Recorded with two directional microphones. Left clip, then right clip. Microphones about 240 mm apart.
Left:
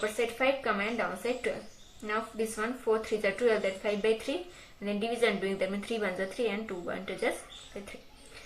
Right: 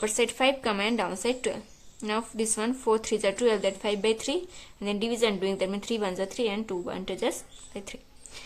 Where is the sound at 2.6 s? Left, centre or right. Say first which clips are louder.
Right 4 dB; right.